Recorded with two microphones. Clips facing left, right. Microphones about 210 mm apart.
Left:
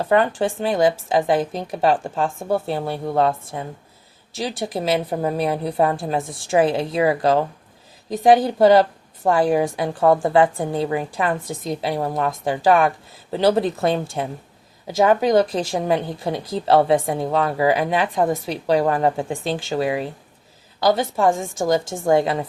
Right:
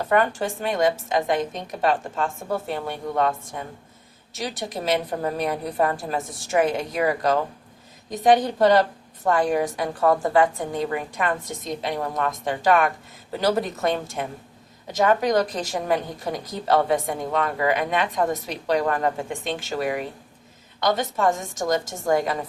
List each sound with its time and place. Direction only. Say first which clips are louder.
0.0 s a woman's voice: left 3 dB; 30° left (ahead or behind)